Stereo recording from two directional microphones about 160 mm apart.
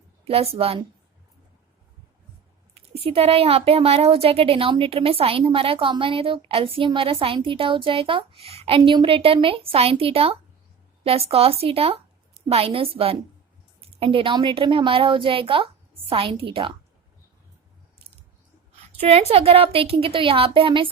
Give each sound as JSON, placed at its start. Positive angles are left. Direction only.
{"t": 0.3, "sound": "speech", "side_deg": -40}
{"t": 2.7, "sound": "speech", "side_deg": -40}
{"t": 18.9, "sound": "speech", "side_deg": -40}